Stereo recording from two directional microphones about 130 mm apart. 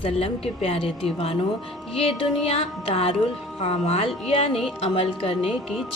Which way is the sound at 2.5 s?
50° left (ahead or behind).